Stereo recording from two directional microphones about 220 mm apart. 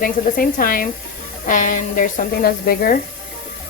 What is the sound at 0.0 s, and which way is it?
A woman's voice, 40° left (ahead or behind).